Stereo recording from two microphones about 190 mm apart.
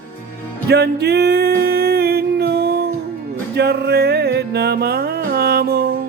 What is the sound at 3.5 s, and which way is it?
Music, 60° right (ahead or behind).